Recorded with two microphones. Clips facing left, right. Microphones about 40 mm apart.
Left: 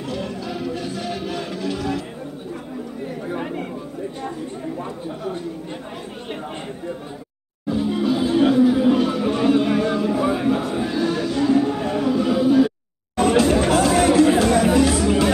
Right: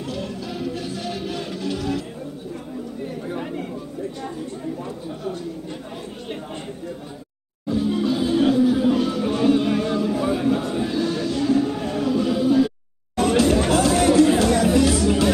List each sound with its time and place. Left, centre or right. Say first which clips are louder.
0.1 s music: left 4 dB; centre
3.3 s chatter: left 3 dB; centre
7.7 s music: left 1 dB; centre
10.1 s a sound: left 1 dB; centre
13.1 s chatter: left 1 dB; centre